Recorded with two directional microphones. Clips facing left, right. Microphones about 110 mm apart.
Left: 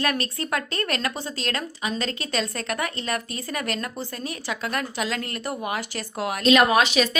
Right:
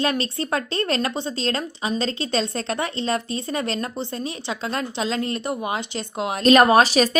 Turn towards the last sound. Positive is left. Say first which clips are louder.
# right 4 dB
turn(degrees=-40)  # may be behind; listen again after turning